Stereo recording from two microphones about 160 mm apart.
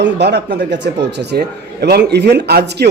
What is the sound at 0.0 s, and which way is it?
A man's voice, 90° right.